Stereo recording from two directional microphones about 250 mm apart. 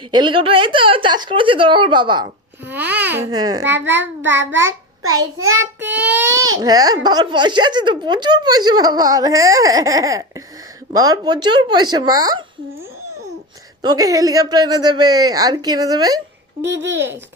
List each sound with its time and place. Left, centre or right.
0.1 s speech: centre
2.6 s speech: centre
3.8 s child singing: right
6.0 s speech: centre
13.8 s speech: centre
16.6 s child singing: right